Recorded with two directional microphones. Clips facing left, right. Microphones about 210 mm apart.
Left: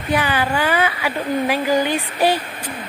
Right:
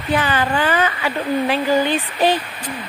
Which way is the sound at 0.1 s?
10° left (ahead or behind).